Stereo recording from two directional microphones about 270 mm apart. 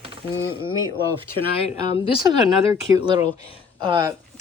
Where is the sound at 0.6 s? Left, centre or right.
Centre.